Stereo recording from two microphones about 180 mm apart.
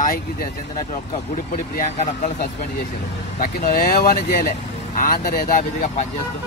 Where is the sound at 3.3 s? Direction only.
50° left (ahead or behind).